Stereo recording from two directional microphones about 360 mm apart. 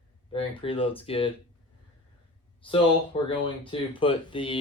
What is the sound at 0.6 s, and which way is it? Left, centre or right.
Speech, centre.